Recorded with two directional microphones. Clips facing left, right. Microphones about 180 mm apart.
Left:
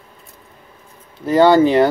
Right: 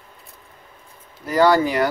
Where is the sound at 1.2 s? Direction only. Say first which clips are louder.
Left 5 dB; 25° left (ahead or behind).